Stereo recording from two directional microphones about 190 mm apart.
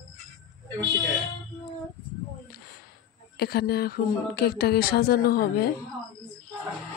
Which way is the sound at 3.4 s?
55° left (ahead or behind).